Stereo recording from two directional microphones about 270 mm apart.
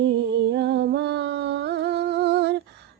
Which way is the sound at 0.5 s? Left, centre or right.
Right.